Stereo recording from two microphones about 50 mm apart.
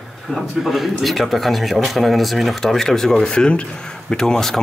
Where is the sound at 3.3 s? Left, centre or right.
Left.